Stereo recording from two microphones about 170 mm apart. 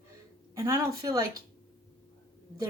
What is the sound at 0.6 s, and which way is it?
Speech, 20° right (ahead or behind).